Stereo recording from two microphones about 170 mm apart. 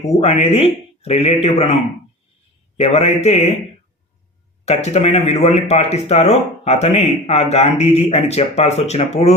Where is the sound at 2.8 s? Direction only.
40° left (ahead or behind).